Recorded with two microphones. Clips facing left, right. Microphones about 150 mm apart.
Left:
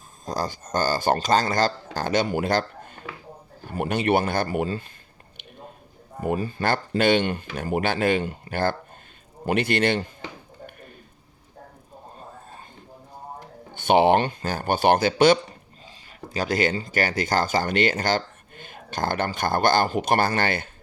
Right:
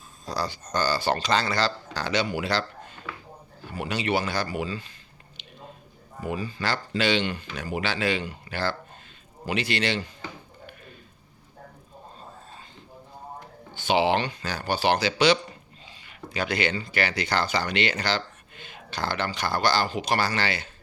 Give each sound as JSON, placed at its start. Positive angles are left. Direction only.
{"t": 0.3, "sound": "speech", "side_deg": 45}
{"t": 5.4, "sound": "a sound", "side_deg": 55}
{"t": 6.1, "sound": "speech", "side_deg": 50}
{"t": 10.7, "sound": "a sound", "side_deg": 50}
{"t": 13.7, "sound": "speech", "side_deg": 55}
{"t": 16.0, "sound": "speech", "side_deg": 40}